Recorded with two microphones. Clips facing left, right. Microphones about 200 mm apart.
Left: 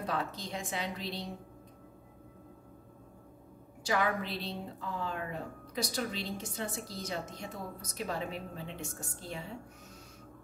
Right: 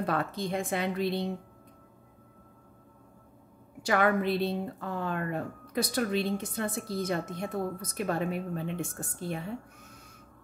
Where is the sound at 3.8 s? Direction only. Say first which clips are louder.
Right 6 dB; 60° right (ahead or behind).